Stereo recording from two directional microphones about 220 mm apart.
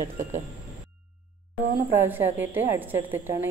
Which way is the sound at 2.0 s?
10° right (ahead or behind).